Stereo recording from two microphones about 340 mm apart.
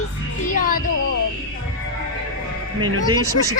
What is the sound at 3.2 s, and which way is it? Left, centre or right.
Speech, right.